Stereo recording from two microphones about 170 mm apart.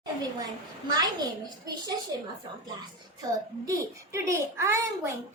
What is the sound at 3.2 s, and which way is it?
A child's voice, 20° right (ahead or behind).